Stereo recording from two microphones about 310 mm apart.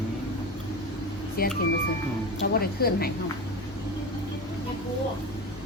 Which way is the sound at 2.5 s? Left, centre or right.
Left.